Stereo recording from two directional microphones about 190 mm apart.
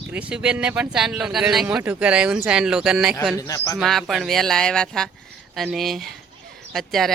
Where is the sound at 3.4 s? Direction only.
20° left (ahead or behind).